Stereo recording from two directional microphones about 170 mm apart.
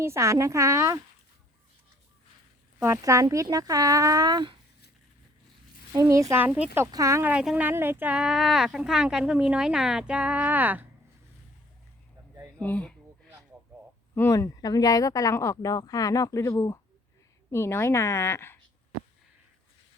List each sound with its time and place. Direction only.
0.0 s a woman's voice: 15° right (ahead or behind)
2.7 s a woman's voice: 15° right (ahead or behind)
5.9 s speech: 20° right (ahead or behind)
12.5 s speech: 5° left (ahead or behind)
14.2 s a woman's voice: 15° left (ahead or behind)